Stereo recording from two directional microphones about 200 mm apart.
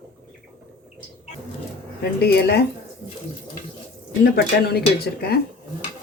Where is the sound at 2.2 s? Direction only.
50° left (ahead or behind).